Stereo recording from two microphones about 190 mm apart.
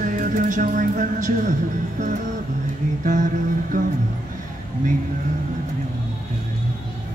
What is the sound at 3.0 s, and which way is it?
Speech, 45° right (ahead or behind).